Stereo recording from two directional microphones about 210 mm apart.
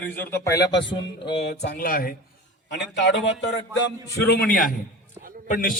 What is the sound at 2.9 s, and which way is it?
Speech, 55° left (ahead or behind).